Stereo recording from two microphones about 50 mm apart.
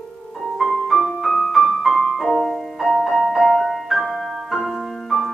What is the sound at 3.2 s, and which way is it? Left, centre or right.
Music, centre.